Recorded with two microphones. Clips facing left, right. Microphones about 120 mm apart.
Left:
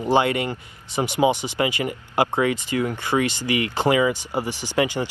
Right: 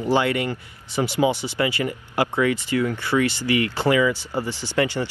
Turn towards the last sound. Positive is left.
turn(degrees=15)  # may be behind; listen again after turning